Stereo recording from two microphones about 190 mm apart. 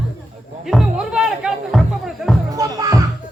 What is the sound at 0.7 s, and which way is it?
Speech, 5° right (ahead or behind).